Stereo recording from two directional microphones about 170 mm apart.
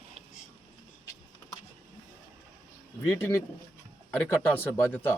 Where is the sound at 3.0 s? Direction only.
15° left (ahead or behind).